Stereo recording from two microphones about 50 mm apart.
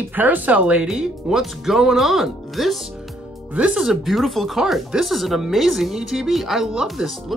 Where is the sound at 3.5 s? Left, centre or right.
Right.